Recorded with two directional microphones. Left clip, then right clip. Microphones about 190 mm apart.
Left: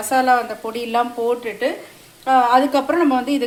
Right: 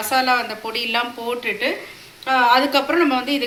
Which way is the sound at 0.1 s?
60° left (ahead or behind).